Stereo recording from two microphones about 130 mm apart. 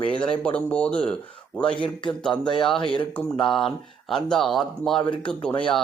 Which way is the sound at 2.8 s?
40° left (ahead or behind).